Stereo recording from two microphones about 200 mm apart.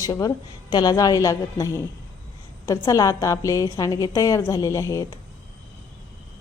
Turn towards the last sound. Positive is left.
turn(degrees=15)  # may be behind; listen again after turning